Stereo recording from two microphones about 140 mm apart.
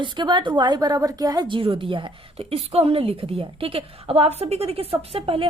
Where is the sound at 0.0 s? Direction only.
35° right (ahead or behind).